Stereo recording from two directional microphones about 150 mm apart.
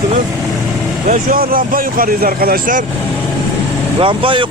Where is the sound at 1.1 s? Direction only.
70° right (ahead or behind).